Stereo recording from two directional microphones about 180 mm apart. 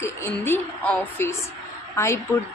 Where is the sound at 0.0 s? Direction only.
15° left (ahead or behind).